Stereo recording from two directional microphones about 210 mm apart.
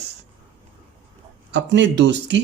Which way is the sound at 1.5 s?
60° right (ahead or behind).